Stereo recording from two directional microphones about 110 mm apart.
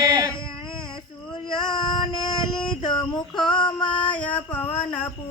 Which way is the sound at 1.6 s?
40° left (ahead or behind).